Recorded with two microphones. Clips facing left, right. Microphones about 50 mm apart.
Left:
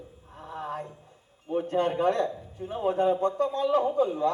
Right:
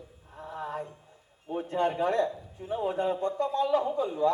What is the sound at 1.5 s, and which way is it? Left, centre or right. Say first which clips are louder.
A man's voice: left 2 dB; left.